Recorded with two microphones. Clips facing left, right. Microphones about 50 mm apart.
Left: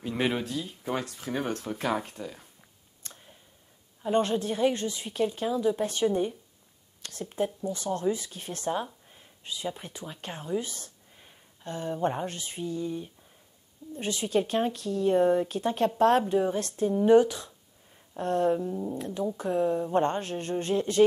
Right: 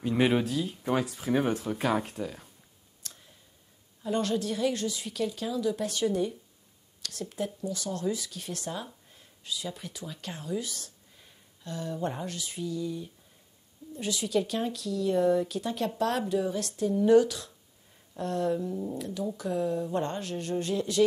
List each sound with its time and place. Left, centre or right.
0.0 s speech: centre
3.0 s clicking: left
4.0 s a woman's voice: left